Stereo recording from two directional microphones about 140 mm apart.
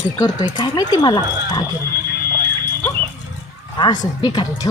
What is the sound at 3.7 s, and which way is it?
Speech, 30° left (ahead or behind).